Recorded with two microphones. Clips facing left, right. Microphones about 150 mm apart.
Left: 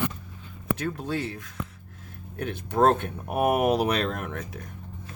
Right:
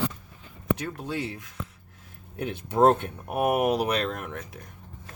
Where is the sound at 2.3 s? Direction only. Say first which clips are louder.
Even; 20° right (ahead or behind).